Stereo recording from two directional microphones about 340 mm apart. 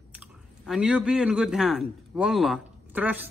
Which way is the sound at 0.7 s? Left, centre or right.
Centre.